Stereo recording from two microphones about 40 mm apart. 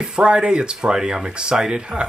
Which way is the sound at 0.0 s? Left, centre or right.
Right.